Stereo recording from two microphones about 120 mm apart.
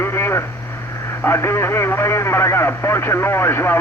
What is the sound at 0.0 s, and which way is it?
Radio, 20° left (ahead or behind).